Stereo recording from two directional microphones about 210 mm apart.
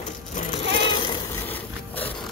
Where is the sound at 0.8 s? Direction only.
25° left (ahead or behind).